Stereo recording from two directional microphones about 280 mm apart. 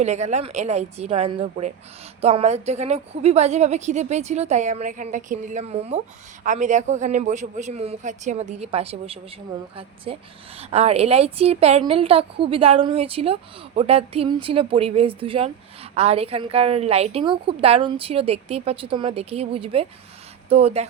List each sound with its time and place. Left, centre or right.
0.0 s a woman's voice: right